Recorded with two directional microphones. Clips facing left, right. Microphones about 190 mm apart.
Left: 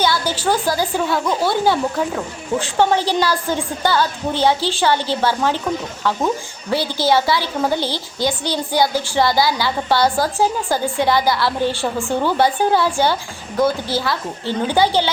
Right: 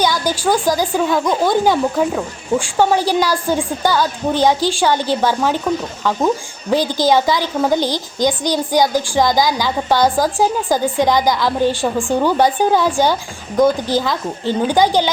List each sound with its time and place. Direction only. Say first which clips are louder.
0.0 s a woman's voice: right 2 dB; 15° right (ahead or behind)
6.7 s a woman's voice: right 3 dB; 15° right (ahead or behind)